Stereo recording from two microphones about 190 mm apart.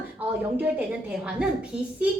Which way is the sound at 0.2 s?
10° right (ahead or behind).